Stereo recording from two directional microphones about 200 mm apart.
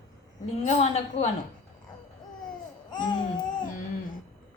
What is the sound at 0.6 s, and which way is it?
Speech, 35° left (ahead or behind).